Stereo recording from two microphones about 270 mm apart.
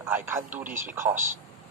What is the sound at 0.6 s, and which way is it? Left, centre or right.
Speech, right.